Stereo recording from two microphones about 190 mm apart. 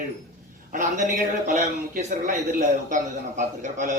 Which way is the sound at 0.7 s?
40° right (ahead or behind).